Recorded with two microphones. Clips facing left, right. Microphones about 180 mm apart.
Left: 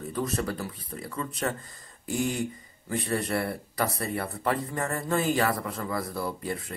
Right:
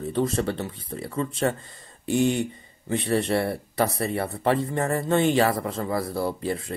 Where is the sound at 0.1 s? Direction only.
30° right (ahead or behind).